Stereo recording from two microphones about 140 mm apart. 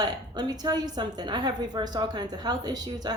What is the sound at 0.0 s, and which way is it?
A woman's voice, 30° right (ahead or behind).